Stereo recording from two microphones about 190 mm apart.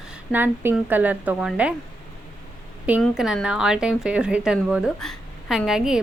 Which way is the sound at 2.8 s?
5° right (ahead or behind).